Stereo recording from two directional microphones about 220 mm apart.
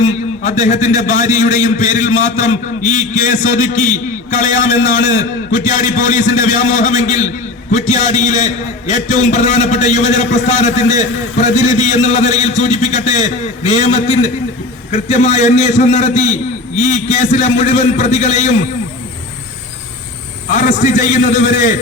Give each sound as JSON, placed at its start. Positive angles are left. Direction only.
{"t": 0.0, "sound": "a man's voice", "side_deg": 30}
{"t": 20.5, "sound": "a man's voice", "side_deg": 35}